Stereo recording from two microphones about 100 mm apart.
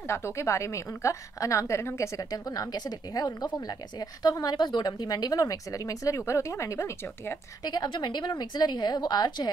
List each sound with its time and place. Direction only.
0.0 s speech: 25° left (ahead or behind)
7.6 s a woman's voice: 45° left (ahead or behind)